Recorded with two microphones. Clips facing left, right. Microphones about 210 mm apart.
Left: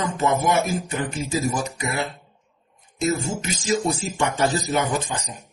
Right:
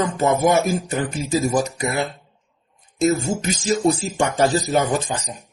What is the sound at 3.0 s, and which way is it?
Speech, 40° right (ahead or behind).